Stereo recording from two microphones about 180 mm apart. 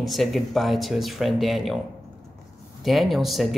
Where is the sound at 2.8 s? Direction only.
Centre (ahead or behind).